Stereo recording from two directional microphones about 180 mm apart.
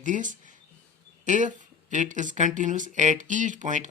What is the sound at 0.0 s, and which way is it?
Speech, 45° right (ahead or behind).